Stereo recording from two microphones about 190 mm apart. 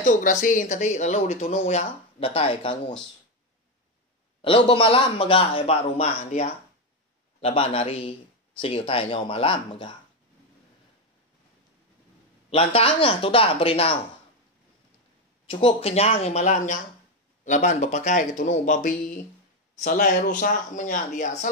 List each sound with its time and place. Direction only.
0.0 s speech: 45° left (ahead or behind)
4.4 s a man's voice: 30° left (ahead or behind)
12.4 s a man's voice: 30° left (ahead or behind)
15.4 s speech: 30° left (ahead or behind)